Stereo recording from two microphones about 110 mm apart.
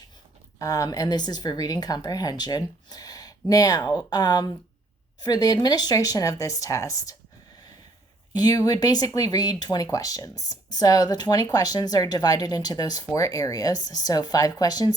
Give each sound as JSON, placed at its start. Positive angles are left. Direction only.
{"t": 0.6, "sound": "speech", "side_deg": 35}
{"t": 8.3, "sound": "speech", "side_deg": 35}